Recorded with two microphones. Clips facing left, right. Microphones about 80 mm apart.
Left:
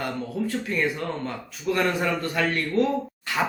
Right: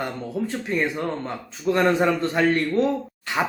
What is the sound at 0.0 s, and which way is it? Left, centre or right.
Speech, right.